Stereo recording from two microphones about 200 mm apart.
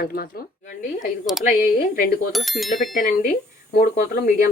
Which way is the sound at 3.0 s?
40° left (ahead or behind).